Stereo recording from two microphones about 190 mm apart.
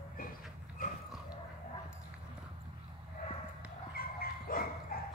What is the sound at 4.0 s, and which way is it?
Dog, 50° left (ahead or behind).